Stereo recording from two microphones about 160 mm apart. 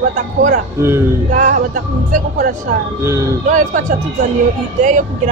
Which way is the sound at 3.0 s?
20° right (ahead or behind).